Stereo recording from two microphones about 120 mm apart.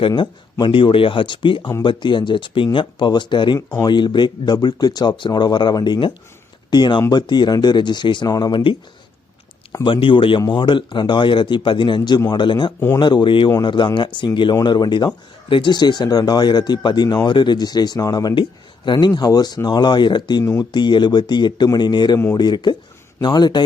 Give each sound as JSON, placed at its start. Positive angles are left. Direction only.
{"t": 0.6, "sound": "speech", "side_deg": 45}
{"t": 9.8, "sound": "speech", "side_deg": 45}